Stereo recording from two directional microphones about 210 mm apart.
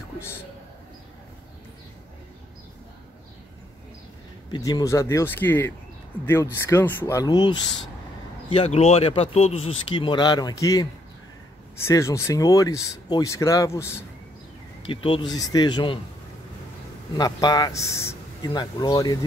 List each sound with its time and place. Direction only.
4.5 s speech: 20° left (ahead or behind)
14.8 s speech: 25° left (ahead or behind)
17.2 s speech: 20° left (ahead or behind)